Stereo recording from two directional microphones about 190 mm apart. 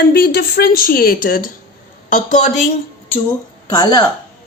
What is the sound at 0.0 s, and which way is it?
A woman's voice, 55° left (ahead or behind).